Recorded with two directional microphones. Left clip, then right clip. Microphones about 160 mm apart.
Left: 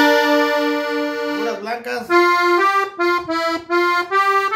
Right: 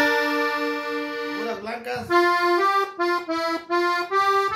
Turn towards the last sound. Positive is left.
turn(degrees=20)  # may be behind; listen again after turning